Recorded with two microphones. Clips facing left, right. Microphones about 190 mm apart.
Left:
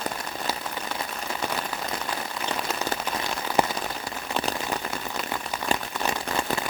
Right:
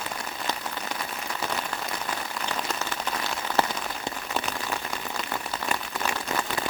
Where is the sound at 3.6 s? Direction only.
15° left (ahead or behind).